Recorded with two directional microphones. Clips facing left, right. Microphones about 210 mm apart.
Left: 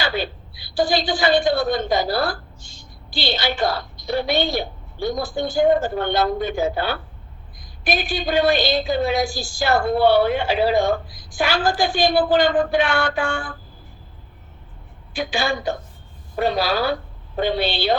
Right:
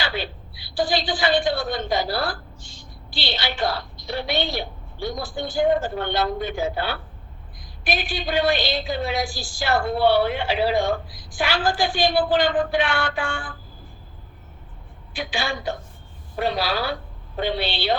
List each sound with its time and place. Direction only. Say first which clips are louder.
0.0 s a woman's voice: left 4 dB; 45° left (ahead or behind)
15.1 s a woman's voice: left 5 dB; 45° left (ahead or behind)